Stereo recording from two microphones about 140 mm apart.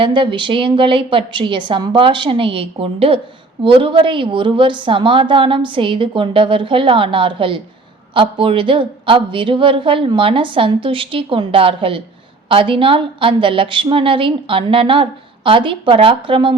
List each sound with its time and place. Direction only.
0.0 s a woman's voice: 35° right (ahead or behind)